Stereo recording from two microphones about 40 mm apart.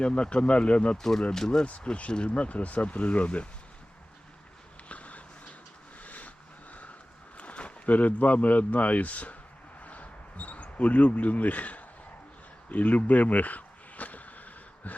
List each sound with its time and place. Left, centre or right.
0.0 s speech: left
1.3 s speech: centre
1.6 s speech: left
4.9 s a sound: left
7.9 s speech: left
9.8 s a sound: left